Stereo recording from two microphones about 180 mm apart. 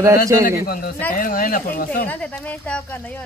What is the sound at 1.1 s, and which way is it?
Speech, 50° left (ahead or behind).